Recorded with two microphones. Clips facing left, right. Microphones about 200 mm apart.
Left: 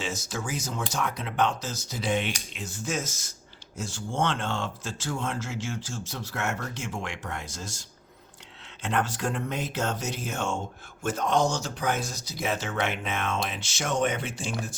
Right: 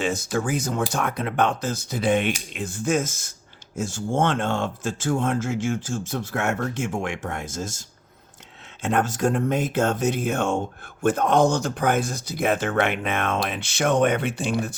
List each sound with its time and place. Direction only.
0.0 s speech: 55° right (ahead or behind)